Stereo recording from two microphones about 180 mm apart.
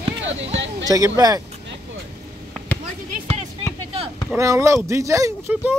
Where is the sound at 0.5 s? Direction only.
90° right.